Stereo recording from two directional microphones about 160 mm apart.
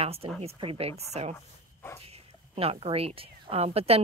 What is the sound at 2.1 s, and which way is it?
Speech, 35° right (ahead or behind).